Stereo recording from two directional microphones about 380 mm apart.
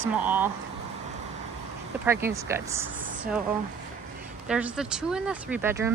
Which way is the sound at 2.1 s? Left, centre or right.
Centre.